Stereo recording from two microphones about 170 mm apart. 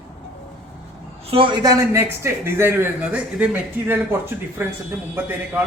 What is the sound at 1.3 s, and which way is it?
Speech, 30° right (ahead or behind).